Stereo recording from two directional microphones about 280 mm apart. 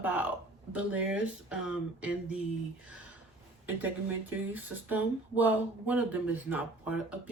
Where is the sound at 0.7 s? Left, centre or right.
Centre.